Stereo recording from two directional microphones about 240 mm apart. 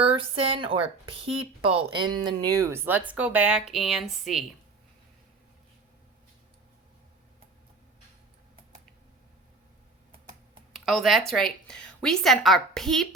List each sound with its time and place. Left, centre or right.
0.0 s speech: right; by 4.4 s centre
10.7 s a woman's voice: centre